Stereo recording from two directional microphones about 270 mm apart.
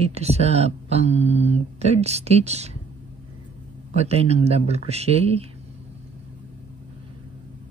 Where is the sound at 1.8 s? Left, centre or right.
Right.